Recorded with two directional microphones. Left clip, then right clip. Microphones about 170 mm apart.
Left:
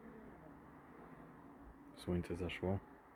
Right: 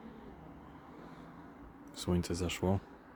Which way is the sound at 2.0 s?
20° right (ahead or behind).